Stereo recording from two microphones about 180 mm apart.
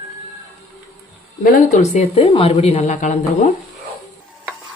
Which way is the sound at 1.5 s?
45° left (ahead or behind).